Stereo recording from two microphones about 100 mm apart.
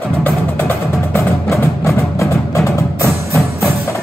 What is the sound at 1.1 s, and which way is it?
Music, 30° left (ahead or behind).